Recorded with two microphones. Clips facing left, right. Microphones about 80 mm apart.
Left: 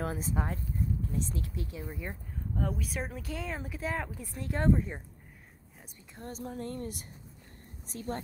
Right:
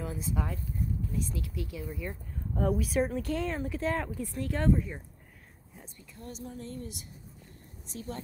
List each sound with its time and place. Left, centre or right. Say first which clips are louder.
0.0 s speech: left 1 dB; left
2.5 s speech: right 7 dB; centre
4.3 s speech: even; left
6.1 s speech: left 3 dB; left